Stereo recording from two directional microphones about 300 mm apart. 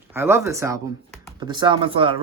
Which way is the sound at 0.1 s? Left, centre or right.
Centre.